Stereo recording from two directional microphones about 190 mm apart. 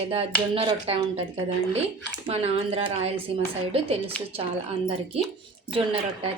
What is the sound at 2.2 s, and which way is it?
A woman's voice, 30° right (ahead or behind).